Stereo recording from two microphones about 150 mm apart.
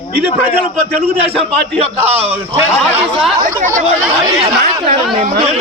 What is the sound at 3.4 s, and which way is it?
Speech, 60° right (ahead or behind).